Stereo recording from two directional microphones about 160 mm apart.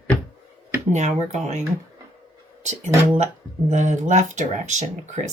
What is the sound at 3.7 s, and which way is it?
Speech, 50° right (ahead or behind).